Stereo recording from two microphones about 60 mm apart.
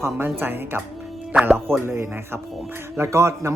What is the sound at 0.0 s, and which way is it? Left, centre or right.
Speech, right.